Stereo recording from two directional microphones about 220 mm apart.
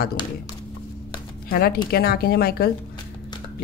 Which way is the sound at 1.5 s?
45° left (ahead or behind).